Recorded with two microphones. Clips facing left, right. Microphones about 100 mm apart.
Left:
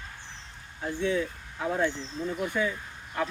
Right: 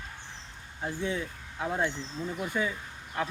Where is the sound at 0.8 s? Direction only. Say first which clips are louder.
Left 4 dB; 25° right (ahead or behind).